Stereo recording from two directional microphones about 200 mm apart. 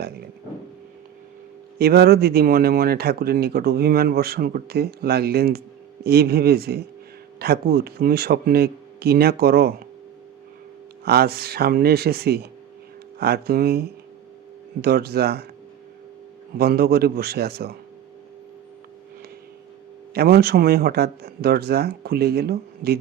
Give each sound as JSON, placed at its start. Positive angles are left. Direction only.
{"t": 1.8, "sound": "speech", "side_deg": -50}
{"t": 11.0, "sound": "speech", "side_deg": -50}
{"t": 16.6, "sound": "speech", "side_deg": -50}
{"t": 20.1, "sound": "speech", "side_deg": -50}